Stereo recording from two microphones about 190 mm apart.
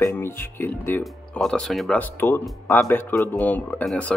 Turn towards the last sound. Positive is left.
turn(degrees=5)  # may be behind; listen again after turning